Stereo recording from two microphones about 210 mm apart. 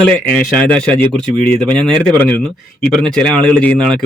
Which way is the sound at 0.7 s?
5° left (ahead or behind).